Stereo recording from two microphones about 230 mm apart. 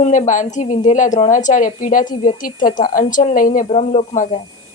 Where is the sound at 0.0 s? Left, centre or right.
Left.